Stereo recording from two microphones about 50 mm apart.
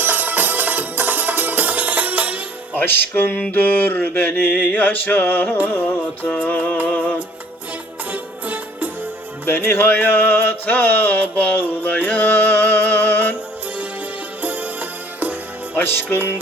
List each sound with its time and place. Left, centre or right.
0.0 s music: right
2.7 s mantra: left
6.8 s music: left
8.1 s music: right
9.5 s a sound: left
14.4 s music: right
15.7 s music: left